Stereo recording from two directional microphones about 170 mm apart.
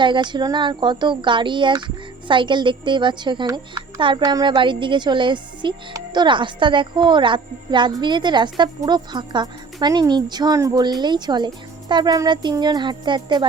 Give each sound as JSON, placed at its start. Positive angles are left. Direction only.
{"t": 0.0, "sound": "a child's voice", "side_deg": -25}